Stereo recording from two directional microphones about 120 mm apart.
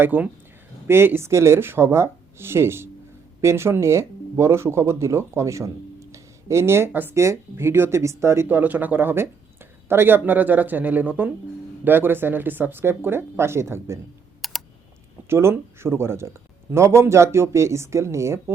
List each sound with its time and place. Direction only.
0.0 s speech: 15° right (ahead or behind)
14.4 s computer keyboard: centre (ahead or behind)
15.3 s speech: 20° right (ahead or behind)